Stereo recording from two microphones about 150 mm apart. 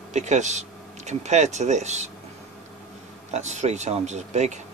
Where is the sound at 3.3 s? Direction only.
50° right (ahead or behind).